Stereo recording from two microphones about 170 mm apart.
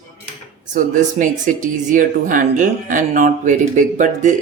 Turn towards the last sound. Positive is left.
turn(degrees=-50)  # may be behind; listen again after turning